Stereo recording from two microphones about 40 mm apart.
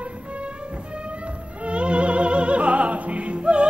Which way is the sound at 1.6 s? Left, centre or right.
Right.